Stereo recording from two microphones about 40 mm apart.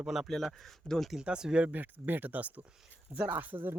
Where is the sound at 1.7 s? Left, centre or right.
Right.